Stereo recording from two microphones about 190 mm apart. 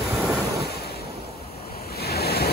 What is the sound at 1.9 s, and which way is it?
Waves, 55° left (ahead or behind).